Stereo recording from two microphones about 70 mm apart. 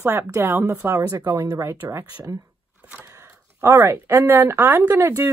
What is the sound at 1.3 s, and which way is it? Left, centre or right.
Speech, right.